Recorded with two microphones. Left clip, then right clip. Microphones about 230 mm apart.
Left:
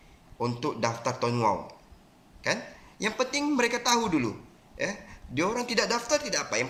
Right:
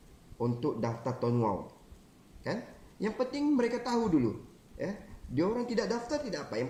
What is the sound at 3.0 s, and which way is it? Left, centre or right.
Speech, left.